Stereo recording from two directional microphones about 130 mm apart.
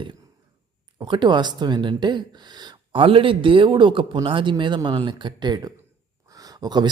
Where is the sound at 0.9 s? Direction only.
35° right (ahead or behind).